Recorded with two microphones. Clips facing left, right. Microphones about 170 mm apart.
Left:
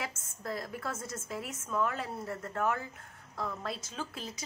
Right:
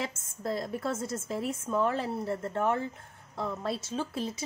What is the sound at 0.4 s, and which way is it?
A woman's voice, 25° right (ahead or behind).